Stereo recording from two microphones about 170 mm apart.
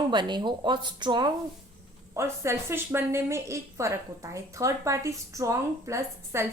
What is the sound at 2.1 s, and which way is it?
A woman's voice, 15° right (ahead or behind).